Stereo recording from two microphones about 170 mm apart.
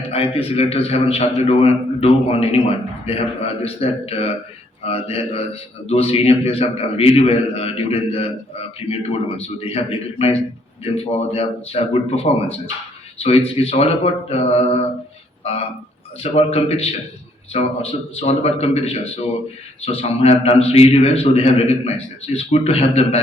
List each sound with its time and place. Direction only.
0.1 s a man's voice: 35° left (ahead or behind)
16.2 s a man's voice: 35° left (ahead or behind)